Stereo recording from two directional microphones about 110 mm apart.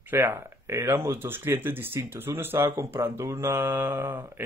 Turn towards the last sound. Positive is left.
turn(degrees=-20)  # may be behind; listen again after turning